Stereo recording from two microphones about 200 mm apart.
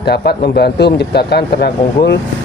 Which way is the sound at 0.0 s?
55° left (ahead or behind).